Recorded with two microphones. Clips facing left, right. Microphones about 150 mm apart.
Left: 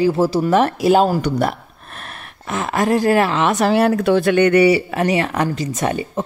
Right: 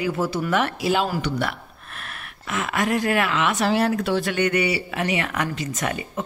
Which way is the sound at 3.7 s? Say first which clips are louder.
Left 6 dB; 60° left (ahead or behind).